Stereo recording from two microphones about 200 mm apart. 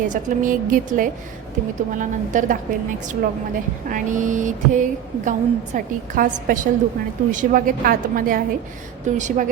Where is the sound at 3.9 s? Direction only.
40° right (ahead or behind).